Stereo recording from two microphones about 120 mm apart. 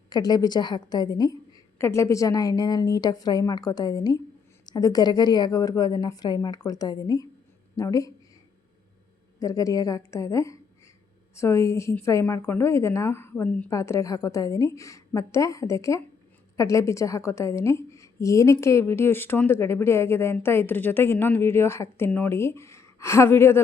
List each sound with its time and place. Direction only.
0.1 s a woman's voice: 35° left (ahead or behind)
1.8 s a woman's voice: 25° left (ahead or behind)
9.4 s a woman's voice: 30° left (ahead or behind); by 13.7 s 15° left (ahead or behind)
13.7 s a woman's voice: 25° left (ahead or behind)